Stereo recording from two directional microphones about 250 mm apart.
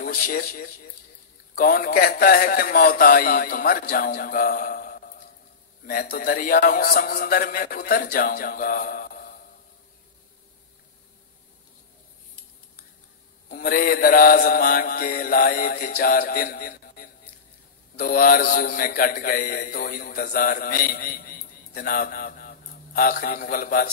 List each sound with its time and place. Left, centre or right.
0.0 s a man's voice: left
13.5 s a man's voice: left